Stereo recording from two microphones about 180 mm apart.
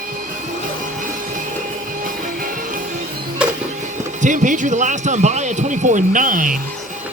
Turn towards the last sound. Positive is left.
turn(degrees=-50)  # may be behind; listen again after turning